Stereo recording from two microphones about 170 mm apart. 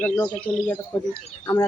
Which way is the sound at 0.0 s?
10° left (ahead or behind).